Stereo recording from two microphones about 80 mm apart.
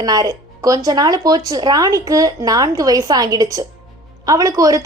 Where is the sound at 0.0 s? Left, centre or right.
Right.